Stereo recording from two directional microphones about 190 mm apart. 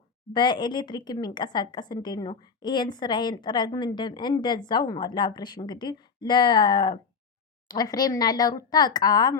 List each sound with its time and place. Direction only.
0.3 s a woman's voice: 25° left (ahead or behind)